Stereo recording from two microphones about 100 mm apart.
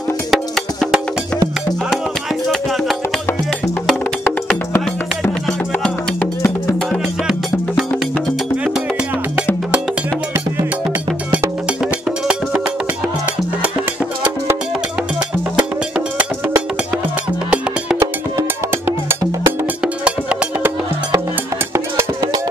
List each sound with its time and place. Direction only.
0.3 s music: centre (ahead or behind)
11.8 s music: 5° right (ahead or behind)
19.8 s music: 10° right (ahead or behind)
21.7 s music: 25° right (ahead or behind)